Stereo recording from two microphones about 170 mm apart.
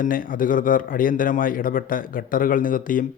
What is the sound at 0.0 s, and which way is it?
Speech, 55° left (ahead or behind).